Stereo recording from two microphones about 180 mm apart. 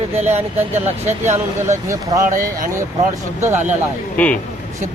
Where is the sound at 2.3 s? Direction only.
50° right (ahead or behind).